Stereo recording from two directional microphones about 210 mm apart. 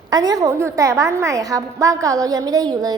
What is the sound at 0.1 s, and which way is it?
A woman's voice, 20° right (ahead or behind).